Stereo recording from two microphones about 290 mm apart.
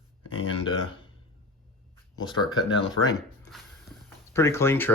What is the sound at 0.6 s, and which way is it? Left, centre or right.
Speech, centre.